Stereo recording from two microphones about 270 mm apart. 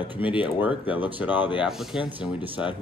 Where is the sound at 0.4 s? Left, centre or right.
Centre.